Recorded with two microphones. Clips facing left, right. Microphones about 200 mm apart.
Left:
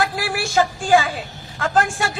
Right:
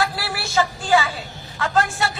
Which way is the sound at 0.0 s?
50° left (ahead or behind).